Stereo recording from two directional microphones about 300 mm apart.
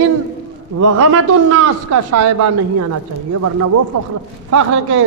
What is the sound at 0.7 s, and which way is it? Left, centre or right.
Speech, right.